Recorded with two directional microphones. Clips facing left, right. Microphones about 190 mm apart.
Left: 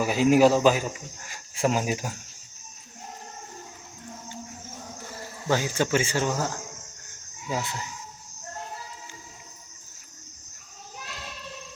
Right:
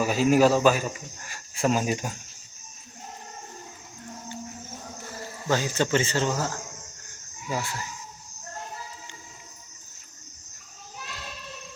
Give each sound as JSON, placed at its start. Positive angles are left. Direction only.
{"t": 0.0, "sound": "speech", "side_deg": 15}
{"t": 5.5, "sound": "speech", "side_deg": 15}